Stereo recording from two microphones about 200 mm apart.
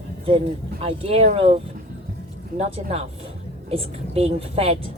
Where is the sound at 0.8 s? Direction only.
30° right (ahead or behind).